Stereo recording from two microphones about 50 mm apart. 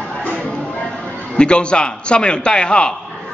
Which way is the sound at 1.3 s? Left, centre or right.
Centre.